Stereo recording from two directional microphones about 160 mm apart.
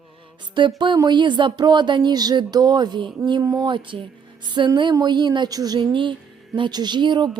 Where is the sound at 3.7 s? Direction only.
30° right (ahead or behind).